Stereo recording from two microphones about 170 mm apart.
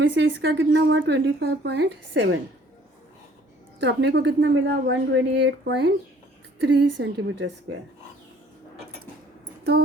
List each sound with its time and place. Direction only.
0.0 s a woman's voice: 90° right
3.8 s a woman's voice: 85° right